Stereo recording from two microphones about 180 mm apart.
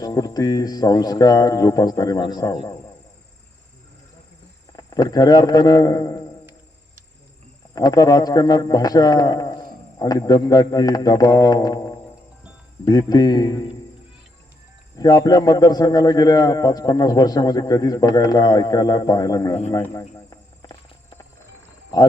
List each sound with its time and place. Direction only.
0.0 s a man's voice: 20° left (ahead or behind)
4.8 s a man's voice: 20° left (ahead or behind)
7.8 s a man's voice: 20° left (ahead or behind)
14.9 s a man's voice: 20° left (ahead or behind)
19.7 s cricket: 15° left (ahead or behind)